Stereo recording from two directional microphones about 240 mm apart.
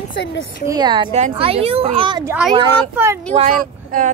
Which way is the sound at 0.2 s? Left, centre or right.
Left.